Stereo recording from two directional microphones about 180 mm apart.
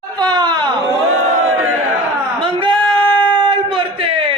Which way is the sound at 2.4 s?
30° right (ahead or behind).